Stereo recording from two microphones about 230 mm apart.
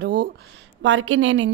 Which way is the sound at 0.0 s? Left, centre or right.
Right.